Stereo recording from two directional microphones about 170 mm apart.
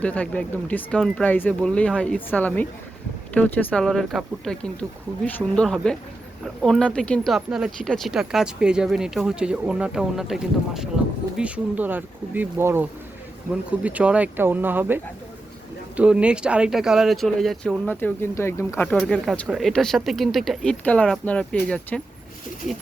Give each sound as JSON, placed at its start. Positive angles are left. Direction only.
{"t": 0.0, "sound": "speech", "side_deg": 10}
{"t": 17.8, "sound": "speech", "side_deg": 10}
{"t": 18.9, "sound": "speech", "side_deg": 5}